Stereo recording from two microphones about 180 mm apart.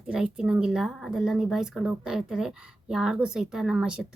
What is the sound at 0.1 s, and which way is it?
Speech, 5° right (ahead or behind).